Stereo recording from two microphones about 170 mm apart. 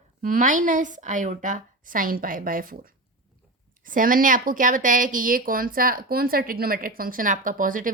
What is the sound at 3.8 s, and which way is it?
Speech, 55° right (ahead or behind).